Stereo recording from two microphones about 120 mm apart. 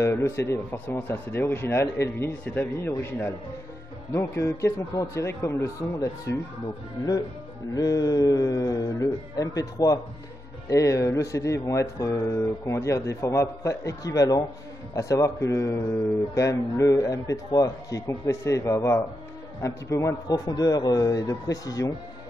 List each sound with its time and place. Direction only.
0.0 s speech: 20° left (ahead or behind)
7.7 s a man's voice: 30° left (ahead or behind)